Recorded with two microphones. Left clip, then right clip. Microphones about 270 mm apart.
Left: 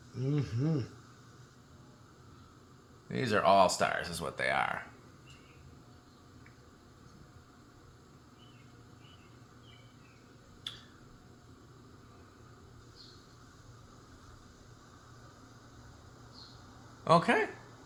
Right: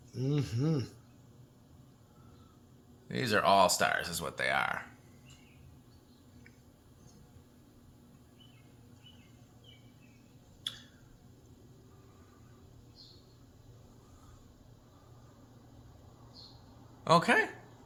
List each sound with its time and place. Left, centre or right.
0.3 s speech: right
3.1 s speech: centre
17.0 s speech: centre